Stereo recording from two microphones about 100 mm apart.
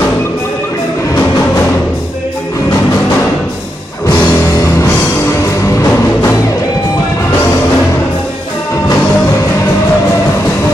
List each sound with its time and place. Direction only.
4.8 s music: 30° left (ahead or behind)